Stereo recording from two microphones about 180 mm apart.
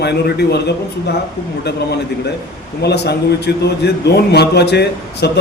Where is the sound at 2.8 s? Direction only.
65° left (ahead or behind).